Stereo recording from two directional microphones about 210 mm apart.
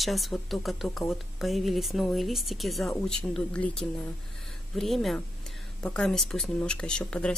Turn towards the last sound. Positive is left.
turn(degrees=5)  # may be behind; listen again after turning